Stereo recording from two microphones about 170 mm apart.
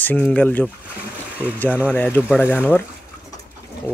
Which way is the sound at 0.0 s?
10° left (ahead or behind).